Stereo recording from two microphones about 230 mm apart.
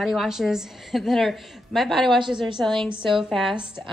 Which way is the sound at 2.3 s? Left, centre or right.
Right.